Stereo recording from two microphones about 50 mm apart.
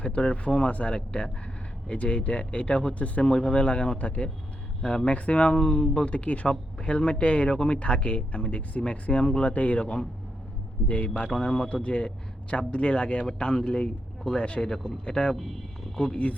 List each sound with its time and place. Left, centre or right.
0.0 s speech: centre
11.3 s speech: centre